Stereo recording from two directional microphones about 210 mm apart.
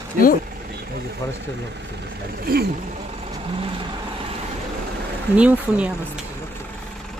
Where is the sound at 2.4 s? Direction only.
45° right (ahead or behind).